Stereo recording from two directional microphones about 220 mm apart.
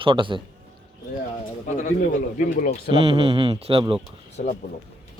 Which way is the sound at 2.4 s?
40° left (ahead or behind).